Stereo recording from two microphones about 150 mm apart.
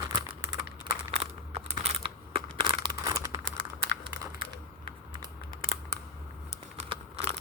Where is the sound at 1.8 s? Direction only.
35° right (ahead or behind).